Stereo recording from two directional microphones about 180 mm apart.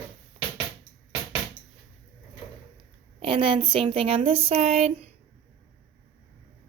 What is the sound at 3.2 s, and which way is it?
A woman's voice, 30° right (ahead or behind).